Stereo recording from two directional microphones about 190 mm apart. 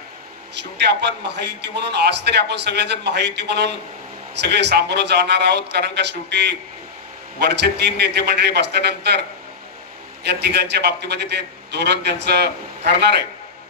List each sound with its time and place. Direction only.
0.6 s a man's voice: 65° right (ahead or behind)
10.2 s a man's voice: 60° right (ahead or behind)